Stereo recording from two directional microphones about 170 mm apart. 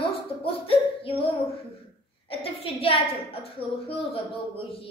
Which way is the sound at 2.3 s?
35° left (ahead or behind).